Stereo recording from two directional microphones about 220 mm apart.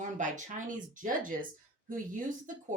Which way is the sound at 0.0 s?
35° right (ahead or behind).